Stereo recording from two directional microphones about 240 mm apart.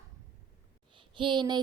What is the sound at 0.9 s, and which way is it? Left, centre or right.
Speech, centre.